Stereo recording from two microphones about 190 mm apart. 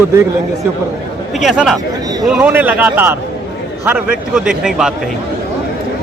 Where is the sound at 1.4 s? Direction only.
Centre (ahead or behind).